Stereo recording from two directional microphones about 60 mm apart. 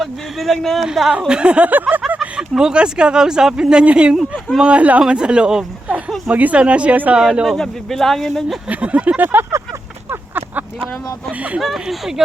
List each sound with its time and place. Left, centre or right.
0.0 s speech: centre
0.9 s speech: centre
1.3 s a woman's voice: centre
2.3 s speech: centre
6.2 s a woman's voice: right
7.4 s speech: centre
8.7 s a woman's voice: right
10.1 s a sound: right
11.6 s speech: centre